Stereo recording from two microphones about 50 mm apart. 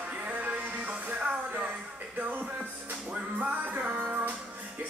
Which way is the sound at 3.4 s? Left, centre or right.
Right.